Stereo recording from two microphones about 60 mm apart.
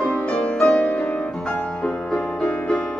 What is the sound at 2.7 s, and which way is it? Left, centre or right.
Music, centre.